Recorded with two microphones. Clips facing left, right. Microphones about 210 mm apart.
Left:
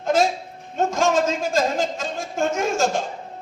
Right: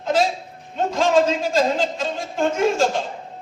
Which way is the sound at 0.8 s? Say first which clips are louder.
Right 2 dB; 45° left (ahead or behind).